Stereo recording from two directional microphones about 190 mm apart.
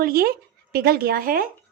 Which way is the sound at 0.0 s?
50° right (ahead or behind).